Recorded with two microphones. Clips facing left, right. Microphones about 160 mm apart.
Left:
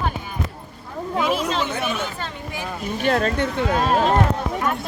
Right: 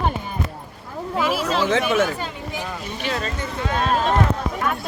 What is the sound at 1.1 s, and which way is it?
Speech, 5° right (ahead or behind).